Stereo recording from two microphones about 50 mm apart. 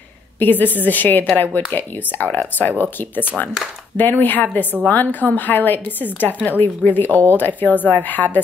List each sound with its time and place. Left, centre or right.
0.4 s a woman's voice: left
3.4 s a woman's voice: left